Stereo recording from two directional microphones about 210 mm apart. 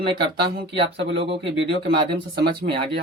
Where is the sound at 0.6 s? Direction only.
25° right (ahead or behind).